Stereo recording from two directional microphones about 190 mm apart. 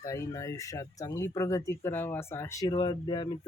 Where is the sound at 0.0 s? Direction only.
15° left (ahead or behind).